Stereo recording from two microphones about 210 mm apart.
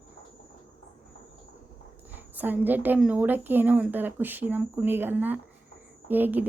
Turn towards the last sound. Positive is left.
turn(degrees=-10)  # may be behind; listen again after turning